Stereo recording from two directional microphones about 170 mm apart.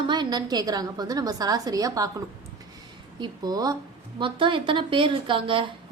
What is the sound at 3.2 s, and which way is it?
A woman's voice, 25° right (ahead or behind).